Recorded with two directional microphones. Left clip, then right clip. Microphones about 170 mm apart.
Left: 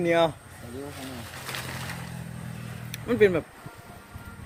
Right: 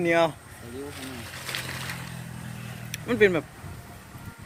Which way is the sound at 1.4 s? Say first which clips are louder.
Right 2 dB; 55° left (ahead or behind).